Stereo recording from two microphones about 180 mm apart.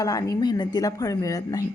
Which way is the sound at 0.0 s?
20° left (ahead or behind).